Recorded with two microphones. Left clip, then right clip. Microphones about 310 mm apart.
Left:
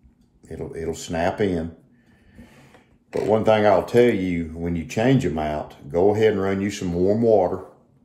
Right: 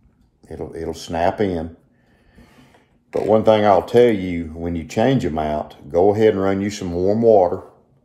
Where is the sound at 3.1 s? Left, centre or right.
Right.